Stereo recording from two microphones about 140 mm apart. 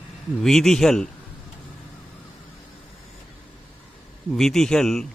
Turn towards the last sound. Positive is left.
turn(degrees=5)  # may be behind; listen again after turning